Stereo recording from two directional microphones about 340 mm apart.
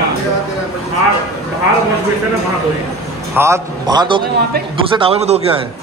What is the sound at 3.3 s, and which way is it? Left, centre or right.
A man's voice, centre.